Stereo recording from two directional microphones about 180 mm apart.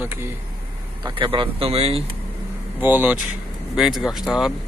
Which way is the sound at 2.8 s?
10° right (ahead or behind).